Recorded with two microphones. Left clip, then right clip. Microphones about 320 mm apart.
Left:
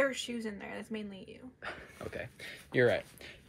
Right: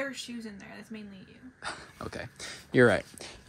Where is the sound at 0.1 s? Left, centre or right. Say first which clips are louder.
Left 2 dB; centre.